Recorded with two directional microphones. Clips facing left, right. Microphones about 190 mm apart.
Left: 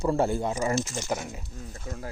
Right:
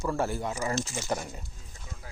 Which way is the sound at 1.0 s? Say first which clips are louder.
Left 1 dB; centre (ahead or behind).